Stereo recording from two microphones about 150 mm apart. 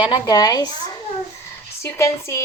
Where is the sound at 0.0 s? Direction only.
25° left (ahead or behind).